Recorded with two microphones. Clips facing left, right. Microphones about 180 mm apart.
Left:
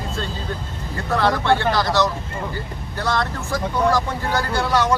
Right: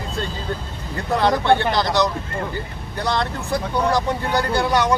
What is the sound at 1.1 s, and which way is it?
Speech, 20° right (ahead or behind).